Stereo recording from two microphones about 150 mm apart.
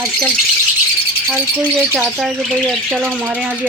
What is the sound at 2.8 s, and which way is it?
Speech, 10° right (ahead or behind).